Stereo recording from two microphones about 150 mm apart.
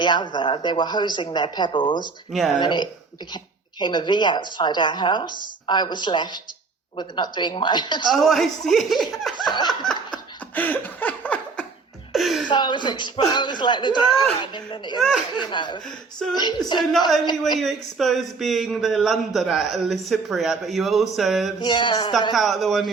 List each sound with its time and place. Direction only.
0.0 s speech: 30° left (ahead or behind)
2.3 s speech: centre (ahead or behind)
2.6 s speech: 30° left (ahead or behind)
8.1 s speech: centre (ahead or behind)
9.6 s laughter: 30° left (ahead or behind)
10.5 s a sound: 10° left (ahead or behind)
12.5 s speech: 30° left (ahead or behind)
14.9 s speech: centre (ahead or behind)
15.4 s speech: 30° left (ahead or behind)
17.6 s speech: centre (ahead or behind)
21.6 s speech: 30° left (ahead or behind)
22.3 s speech: centre (ahead or behind)